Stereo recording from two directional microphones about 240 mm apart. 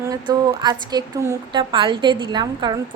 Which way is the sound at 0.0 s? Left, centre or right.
Centre.